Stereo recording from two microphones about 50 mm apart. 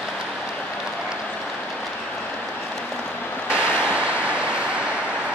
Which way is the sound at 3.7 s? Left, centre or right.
Left.